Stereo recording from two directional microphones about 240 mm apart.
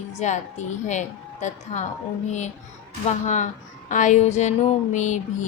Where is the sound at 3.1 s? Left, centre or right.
Left.